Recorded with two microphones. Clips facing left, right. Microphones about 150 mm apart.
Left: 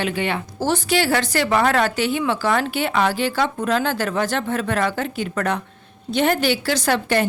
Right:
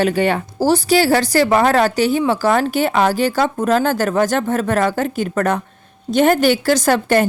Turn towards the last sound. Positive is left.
turn(degrees=-45)  # may be behind; listen again after turning